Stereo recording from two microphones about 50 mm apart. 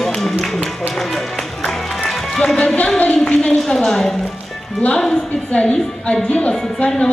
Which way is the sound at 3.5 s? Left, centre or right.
Centre.